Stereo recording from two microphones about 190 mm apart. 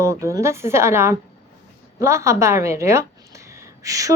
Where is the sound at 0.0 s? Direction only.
15° right (ahead or behind).